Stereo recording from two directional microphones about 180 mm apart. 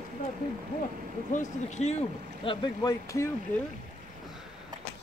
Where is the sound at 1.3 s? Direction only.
40° left (ahead or behind).